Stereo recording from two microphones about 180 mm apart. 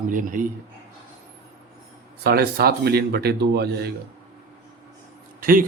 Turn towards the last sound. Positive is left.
turn(degrees=-50)  # may be behind; listen again after turning